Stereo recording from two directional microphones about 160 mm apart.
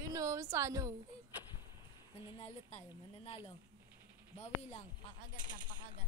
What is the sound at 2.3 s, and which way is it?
Speech, 40° left (ahead or behind).